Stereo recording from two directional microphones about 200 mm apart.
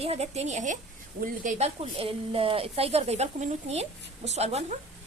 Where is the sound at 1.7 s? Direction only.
25° right (ahead or behind).